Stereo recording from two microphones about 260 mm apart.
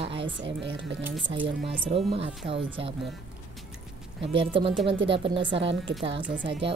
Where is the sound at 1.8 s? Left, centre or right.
Right.